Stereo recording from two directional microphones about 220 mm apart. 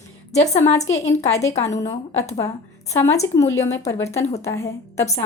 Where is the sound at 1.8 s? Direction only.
15° left (ahead or behind).